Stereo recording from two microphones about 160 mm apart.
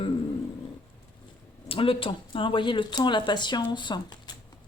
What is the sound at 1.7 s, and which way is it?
Speech, 35° left (ahead or behind).